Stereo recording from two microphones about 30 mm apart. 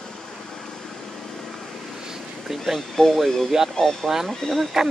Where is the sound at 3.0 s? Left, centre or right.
Centre.